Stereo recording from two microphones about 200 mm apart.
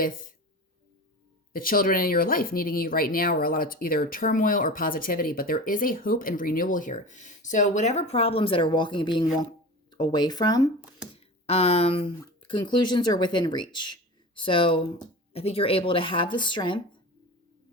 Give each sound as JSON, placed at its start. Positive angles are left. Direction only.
{"t": 1.5, "sound": "speech", "side_deg": 45}
{"t": 11.1, "sound": "speech", "side_deg": 30}